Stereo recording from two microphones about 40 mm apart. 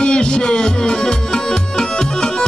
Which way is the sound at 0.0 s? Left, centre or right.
Left.